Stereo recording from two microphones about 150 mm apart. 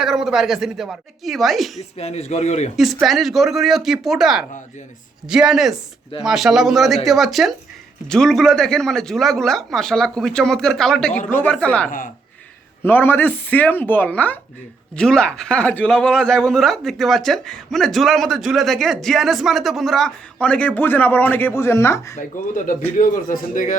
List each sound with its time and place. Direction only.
0.0 s speech: centre (ahead or behind)
1.8 s a man's voice: 45° left (ahead or behind)
2.7 s speech: centre (ahead or behind)
11.9 s speech: 65° left (ahead or behind)
12.8 s speech: 15° left (ahead or behind)
22.5 s speech: 60° left (ahead or behind)